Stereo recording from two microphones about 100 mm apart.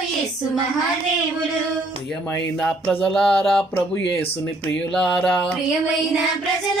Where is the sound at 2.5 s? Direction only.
10° left (ahead or behind).